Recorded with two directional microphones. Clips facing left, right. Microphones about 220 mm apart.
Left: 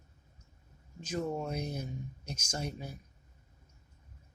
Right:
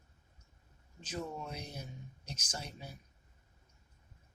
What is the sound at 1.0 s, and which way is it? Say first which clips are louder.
Speech: left 7 dB; 45° left (ahead or behind).